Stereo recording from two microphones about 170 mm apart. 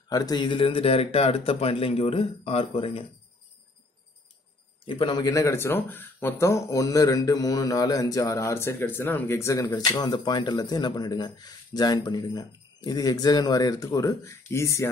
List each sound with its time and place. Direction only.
0.1 s speech: 25° left (ahead or behind)
4.8 s speech: 30° left (ahead or behind)